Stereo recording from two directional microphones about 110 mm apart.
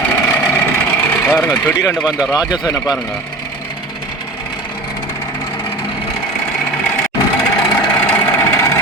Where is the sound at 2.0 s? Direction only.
35° left (ahead or behind).